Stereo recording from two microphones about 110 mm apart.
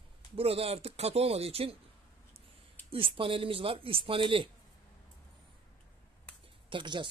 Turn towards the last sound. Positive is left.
turn(degrees=-50)  # may be behind; listen again after turning